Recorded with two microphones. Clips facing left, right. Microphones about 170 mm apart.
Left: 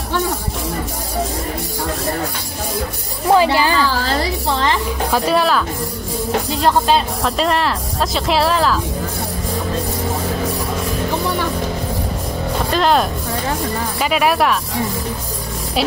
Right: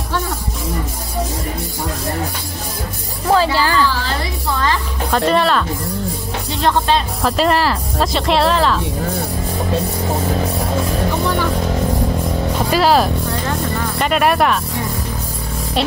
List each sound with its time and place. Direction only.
3.3 s music: 15° left (ahead or behind)
5.1 s speech: 5° left (ahead or behind)
12.7 s speech: 5° right (ahead or behind)